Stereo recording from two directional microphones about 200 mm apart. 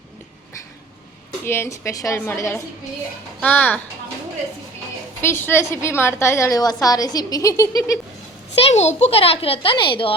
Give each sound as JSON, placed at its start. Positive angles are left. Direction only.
{"t": 1.5, "sound": "a woman's voice", "side_deg": 10}
{"t": 5.2, "sound": "a woman's voice", "side_deg": 10}
{"t": 8.6, "sound": "speech", "side_deg": 35}